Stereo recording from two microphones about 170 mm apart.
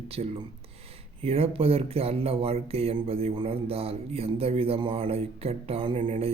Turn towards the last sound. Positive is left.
turn(degrees=-35)  # may be behind; listen again after turning